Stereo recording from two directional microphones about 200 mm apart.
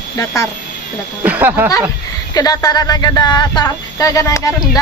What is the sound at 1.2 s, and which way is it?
Speech, 10° right (ahead or behind).